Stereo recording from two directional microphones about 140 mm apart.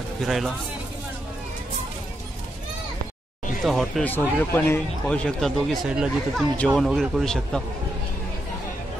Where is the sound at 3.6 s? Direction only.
Centre (ahead or behind).